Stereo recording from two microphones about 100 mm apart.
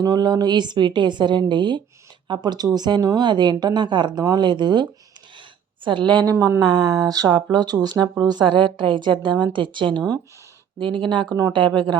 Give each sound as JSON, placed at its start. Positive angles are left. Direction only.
{"t": 0.0, "sound": "speech", "side_deg": -40}